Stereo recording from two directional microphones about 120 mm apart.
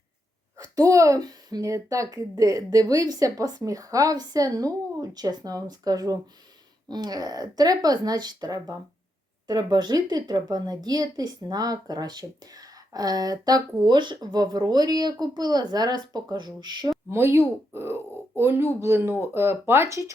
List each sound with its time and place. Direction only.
0.5 s a woman's voice: 30° right (ahead or behind)
17.1 s speech: 20° right (ahead or behind)